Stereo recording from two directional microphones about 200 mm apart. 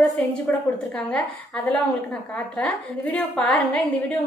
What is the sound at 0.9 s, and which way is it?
A woman's voice, 5° left (ahead or behind).